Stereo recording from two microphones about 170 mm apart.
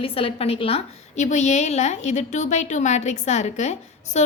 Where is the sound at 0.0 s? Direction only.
35° left (ahead or behind).